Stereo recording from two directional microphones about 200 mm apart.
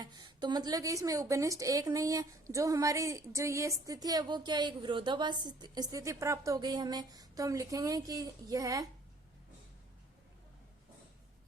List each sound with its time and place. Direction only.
0.3 s a woman's voice: 20° right (ahead or behind)